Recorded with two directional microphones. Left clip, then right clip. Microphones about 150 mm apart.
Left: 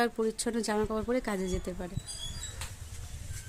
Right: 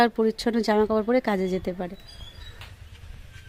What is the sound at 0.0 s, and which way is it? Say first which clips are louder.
Speech: right 8 dB; 35° right (ahead or behind).